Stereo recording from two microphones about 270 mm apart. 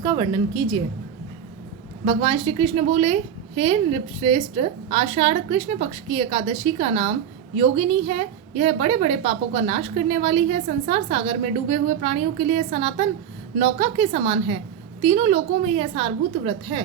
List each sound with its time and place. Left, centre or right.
0.0 s a woman's voice: centre
2.0 s a woman's voice: right